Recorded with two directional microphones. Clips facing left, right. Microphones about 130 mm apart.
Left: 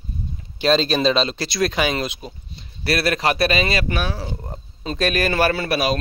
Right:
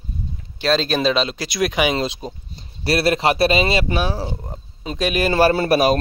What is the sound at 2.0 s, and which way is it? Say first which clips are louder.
A man's voice: right 3 dB; 35° right (ahead or behind).